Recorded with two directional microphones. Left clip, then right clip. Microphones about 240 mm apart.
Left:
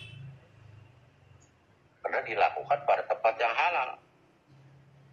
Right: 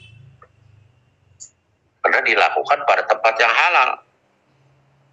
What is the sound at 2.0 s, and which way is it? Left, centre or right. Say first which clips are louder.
Speech: right 12 dB; right.